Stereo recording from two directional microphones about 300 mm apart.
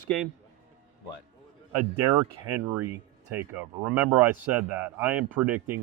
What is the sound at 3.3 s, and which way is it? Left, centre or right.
Speech, centre.